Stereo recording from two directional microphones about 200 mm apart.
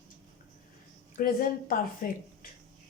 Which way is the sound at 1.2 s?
45° left (ahead or behind).